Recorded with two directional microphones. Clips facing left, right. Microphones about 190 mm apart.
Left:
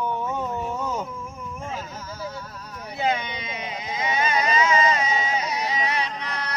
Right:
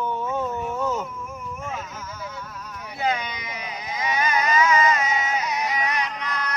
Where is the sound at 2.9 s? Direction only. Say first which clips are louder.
Left 1 dB; 25° left (ahead or behind).